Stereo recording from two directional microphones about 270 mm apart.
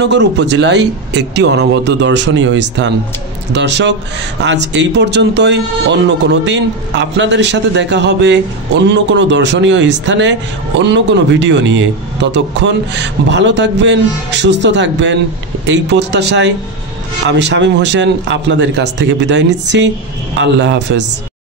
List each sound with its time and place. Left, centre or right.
0.0 s speech: right